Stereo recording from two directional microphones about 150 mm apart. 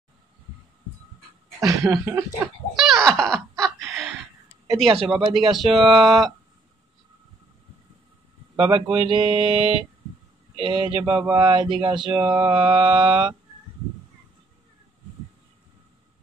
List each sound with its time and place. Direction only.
1.6 s speech: 20° right (ahead or behind)
2.7 s a sound: centre (ahead or behind)
4.7 s speech: centre (ahead or behind)
5.7 s mantra: 30° right (ahead or behind)
5.9 s speech: centre (ahead or behind)
8.5 s mantra: 35° right (ahead or behind)
12.2 s speech: 30° right (ahead or behind)
13.1 s speech: 5° right (ahead or behind)